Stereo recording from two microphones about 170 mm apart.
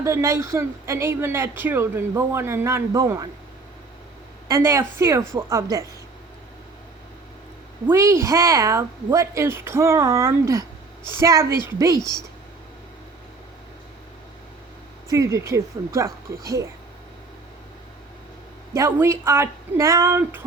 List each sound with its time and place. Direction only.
0.0 s speech: 15° right (ahead or behind)
4.4 s speech: 15° right (ahead or behind)
7.9 s speech: 15° right (ahead or behind)
15.1 s speech: 15° right (ahead or behind)
18.7 s speech: 15° right (ahead or behind)